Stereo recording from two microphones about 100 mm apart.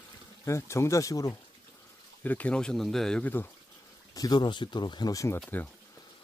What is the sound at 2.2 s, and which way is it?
Speech, 15° left (ahead or behind).